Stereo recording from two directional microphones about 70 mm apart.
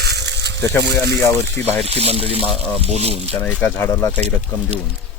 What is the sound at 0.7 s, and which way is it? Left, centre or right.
Speech, left.